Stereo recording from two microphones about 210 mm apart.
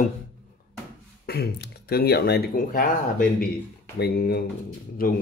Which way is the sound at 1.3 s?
50° left (ahead or behind).